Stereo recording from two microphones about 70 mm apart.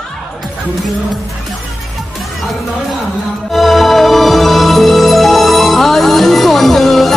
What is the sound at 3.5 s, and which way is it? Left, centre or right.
Music, centre.